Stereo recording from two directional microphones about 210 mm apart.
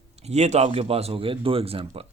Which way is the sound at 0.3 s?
30° right (ahead or behind).